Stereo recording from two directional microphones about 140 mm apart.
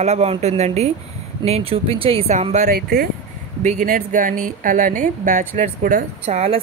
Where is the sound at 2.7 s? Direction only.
90° right.